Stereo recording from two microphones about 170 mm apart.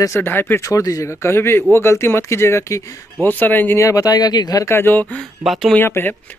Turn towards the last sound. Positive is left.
turn(degrees=10)  # may be behind; listen again after turning